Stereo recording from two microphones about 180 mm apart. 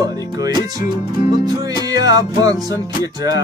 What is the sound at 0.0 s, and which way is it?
Music, 20° right (ahead or behind).